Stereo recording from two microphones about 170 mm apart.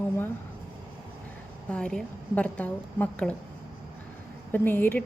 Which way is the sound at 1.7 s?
5° left (ahead or behind).